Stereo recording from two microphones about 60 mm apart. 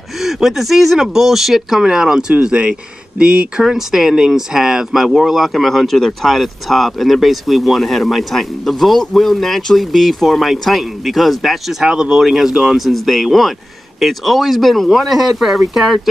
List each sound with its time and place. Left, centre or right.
0.2 s speech: centre
3.6 s speech: centre